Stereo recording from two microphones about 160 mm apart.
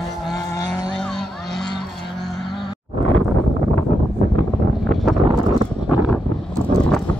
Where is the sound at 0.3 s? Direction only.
20° left (ahead or behind).